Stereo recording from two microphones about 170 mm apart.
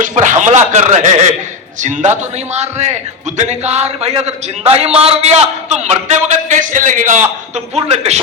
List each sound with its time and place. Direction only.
0.0 s a man's voice: 45° right (ahead or behind)